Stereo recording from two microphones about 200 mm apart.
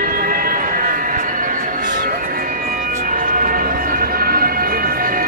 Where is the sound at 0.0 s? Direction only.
45° right (ahead or behind).